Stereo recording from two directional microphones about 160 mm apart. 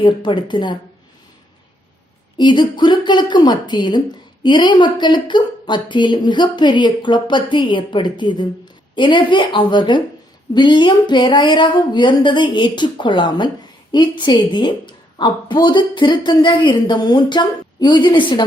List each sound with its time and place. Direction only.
0.0 s speech: 30° left (ahead or behind)
2.4 s speech: 30° left (ahead or behind)